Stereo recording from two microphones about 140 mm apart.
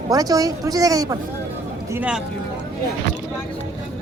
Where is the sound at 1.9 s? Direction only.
10° right (ahead or behind).